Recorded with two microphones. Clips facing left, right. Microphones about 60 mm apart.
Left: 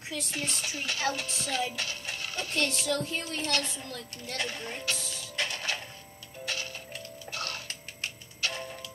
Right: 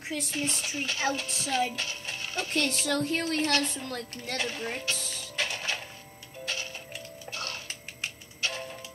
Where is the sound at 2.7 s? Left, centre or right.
Right.